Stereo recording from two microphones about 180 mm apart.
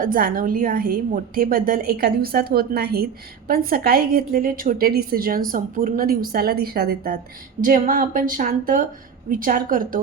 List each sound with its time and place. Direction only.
0.0 s a woman's voice: 50° right (ahead or behind)
7.6 s speech: 50° right (ahead or behind)